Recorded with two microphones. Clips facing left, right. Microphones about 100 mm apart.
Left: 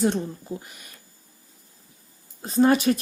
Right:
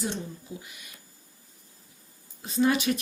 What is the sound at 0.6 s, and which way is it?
Speech, 45° left (ahead or behind).